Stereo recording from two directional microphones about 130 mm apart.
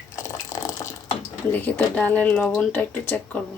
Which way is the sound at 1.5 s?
15° left (ahead or behind).